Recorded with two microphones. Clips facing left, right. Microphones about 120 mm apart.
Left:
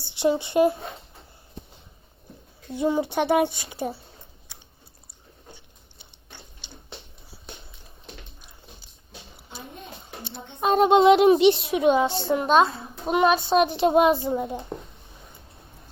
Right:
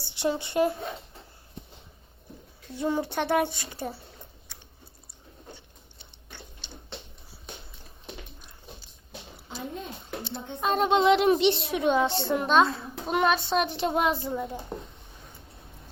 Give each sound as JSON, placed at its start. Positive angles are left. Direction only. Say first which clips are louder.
{"t": 0.1, "sound": "speech", "louder": "left 5 dB", "side_deg": 20}
{"t": 2.7, "sound": "speech", "louder": "left 4 dB", "side_deg": 15}
{"t": 10.6, "sound": "speech", "louder": "left 6 dB", "side_deg": 15}